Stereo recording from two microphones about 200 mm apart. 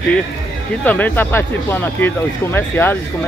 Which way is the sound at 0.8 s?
10° left (ahead or behind).